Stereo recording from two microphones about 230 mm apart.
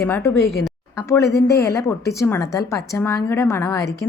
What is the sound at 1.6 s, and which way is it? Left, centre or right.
Speech, centre.